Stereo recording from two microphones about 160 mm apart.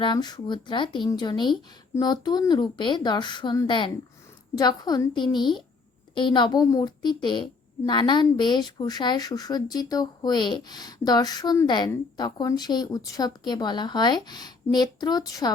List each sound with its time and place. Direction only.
0.0 s speech: 25° left (ahead or behind)